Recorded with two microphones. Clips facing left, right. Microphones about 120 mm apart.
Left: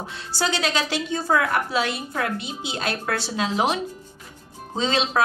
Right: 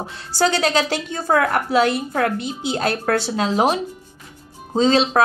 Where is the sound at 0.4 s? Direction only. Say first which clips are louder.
Right 6 dB; 45° right (ahead or behind).